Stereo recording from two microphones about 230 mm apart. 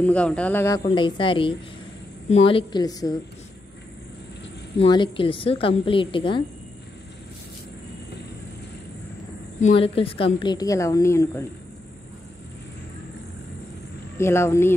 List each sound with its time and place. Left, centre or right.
0.0 s a man's voice: centre
4.7 s a woman's voice: centre
9.6 s a woman's voice: left; by 11.4 s centre
14.1 s a man's voice: centre